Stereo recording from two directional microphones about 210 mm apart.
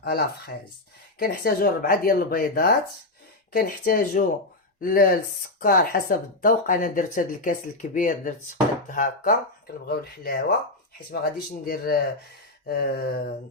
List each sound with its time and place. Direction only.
0.0 s speech: 50° left (ahead or behind)